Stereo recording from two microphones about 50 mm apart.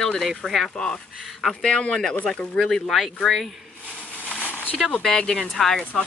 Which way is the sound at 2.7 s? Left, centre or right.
Centre.